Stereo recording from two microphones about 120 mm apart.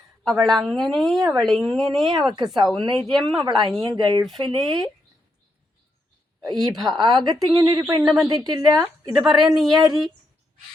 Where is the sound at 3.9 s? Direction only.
35° right (ahead or behind).